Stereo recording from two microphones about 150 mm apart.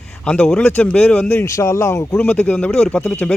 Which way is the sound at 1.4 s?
20° left (ahead or behind).